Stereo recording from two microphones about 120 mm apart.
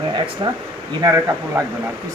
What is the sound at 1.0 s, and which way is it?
Speech, 25° right (ahead or behind).